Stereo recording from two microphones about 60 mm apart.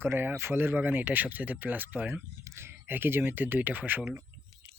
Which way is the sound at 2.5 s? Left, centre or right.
Right.